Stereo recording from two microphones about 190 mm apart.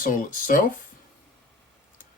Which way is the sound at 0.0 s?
45° left (ahead or behind).